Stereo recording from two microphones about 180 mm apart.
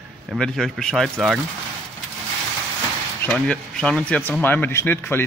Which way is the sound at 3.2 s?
5° left (ahead or behind).